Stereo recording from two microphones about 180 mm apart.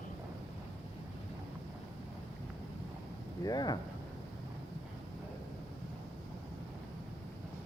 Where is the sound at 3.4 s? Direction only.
20° left (ahead or behind).